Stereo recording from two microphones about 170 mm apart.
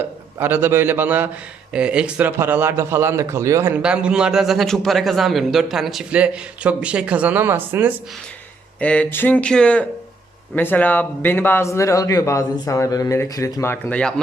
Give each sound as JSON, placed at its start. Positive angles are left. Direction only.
{"t": 0.3, "sound": "a man's voice", "side_deg": -10}
{"t": 8.8, "sound": "a man's voice", "side_deg": 10}